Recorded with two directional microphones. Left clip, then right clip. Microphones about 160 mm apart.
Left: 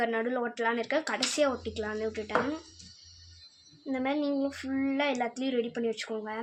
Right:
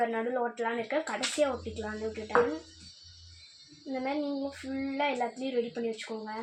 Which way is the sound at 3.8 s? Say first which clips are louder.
Left 2 dB; 30° left (ahead or behind).